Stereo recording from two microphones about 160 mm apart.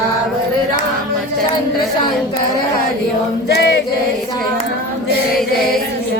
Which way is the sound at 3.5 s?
90° left.